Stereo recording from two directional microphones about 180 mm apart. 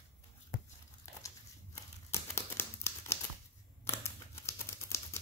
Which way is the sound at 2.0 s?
15° left (ahead or behind).